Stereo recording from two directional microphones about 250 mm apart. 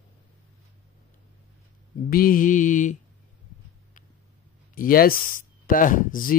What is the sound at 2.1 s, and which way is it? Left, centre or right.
Speech, left.